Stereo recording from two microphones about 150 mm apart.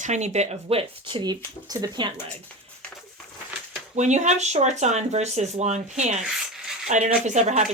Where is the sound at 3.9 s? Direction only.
50° right (ahead or behind).